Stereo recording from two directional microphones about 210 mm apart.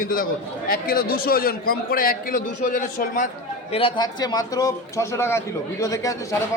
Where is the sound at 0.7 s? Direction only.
45° left (ahead or behind).